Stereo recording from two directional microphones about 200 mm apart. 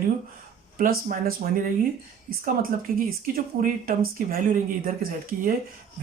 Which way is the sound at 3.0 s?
45° right (ahead or behind).